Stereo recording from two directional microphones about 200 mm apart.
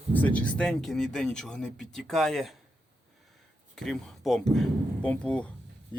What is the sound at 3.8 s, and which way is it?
Speech, centre (ahead or behind).